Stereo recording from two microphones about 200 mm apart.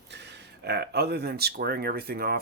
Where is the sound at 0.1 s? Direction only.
60° right (ahead or behind).